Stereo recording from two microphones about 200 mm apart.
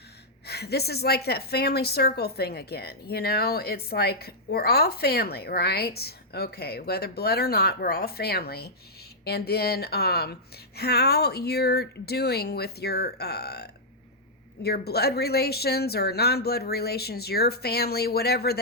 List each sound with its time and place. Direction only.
0.4 s a woman's voice: 55° left (ahead or behind)